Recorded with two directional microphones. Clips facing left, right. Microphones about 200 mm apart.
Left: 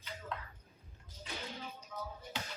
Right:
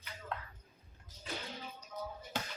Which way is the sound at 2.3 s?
45° right (ahead or behind).